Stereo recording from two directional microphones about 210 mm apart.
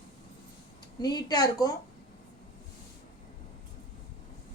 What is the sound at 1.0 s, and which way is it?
Speech, 20° left (ahead or behind).